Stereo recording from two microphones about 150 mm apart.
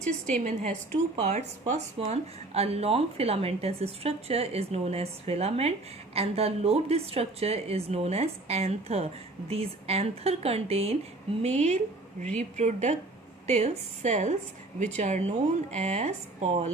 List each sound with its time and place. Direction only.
0.0 s a woman's voice: 55° right (ahead or behind)